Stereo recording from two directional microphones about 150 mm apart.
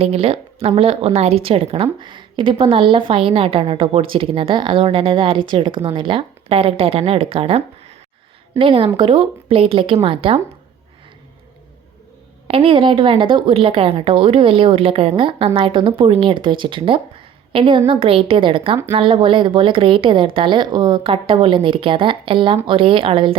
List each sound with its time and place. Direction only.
0.0 s speech: 45° right (ahead or behind)
12.5 s speech: 40° right (ahead or behind)